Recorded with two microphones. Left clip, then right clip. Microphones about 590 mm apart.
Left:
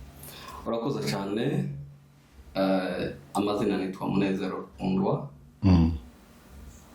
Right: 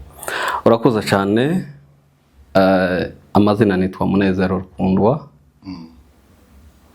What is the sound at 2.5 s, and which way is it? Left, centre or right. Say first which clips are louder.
Speech: right 13 dB; right.